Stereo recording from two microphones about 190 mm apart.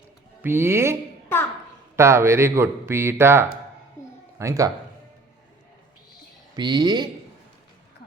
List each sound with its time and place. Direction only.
0.4 s speech: 10° right (ahead or behind)
2.0 s speech: 15° right (ahead or behind)
6.6 s speech: 20° right (ahead or behind)